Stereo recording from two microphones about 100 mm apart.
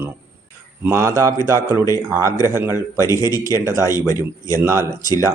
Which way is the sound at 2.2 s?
35° left (ahead or behind).